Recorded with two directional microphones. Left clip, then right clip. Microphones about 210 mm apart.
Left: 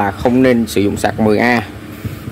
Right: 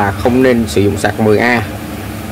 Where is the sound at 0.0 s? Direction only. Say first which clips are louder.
Right 2 dB; 30° left (ahead or behind).